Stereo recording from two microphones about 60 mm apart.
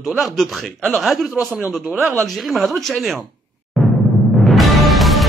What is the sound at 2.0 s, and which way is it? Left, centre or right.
Speech, right.